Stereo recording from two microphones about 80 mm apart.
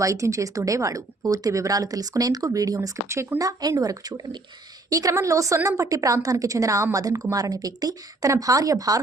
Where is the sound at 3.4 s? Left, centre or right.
Right.